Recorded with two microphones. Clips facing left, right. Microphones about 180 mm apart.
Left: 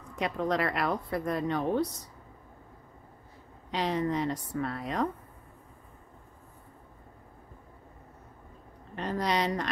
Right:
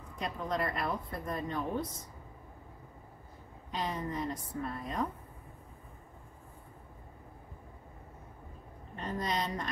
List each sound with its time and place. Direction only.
0.1 s speech: 80° left
3.7 s a woman's voice: 75° left (ahead or behind)
8.9 s a woman's voice: 75° left (ahead or behind)